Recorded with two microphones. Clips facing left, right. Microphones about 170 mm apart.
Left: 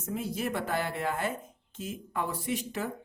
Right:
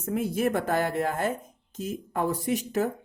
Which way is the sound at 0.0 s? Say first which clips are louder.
Right 7 dB; 55° right (ahead or behind).